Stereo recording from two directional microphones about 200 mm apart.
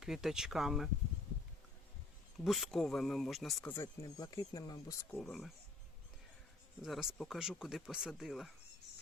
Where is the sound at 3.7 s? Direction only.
15° left (ahead or behind).